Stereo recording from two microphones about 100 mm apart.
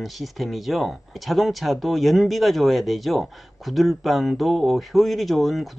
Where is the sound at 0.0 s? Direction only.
Centre (ahead or behind).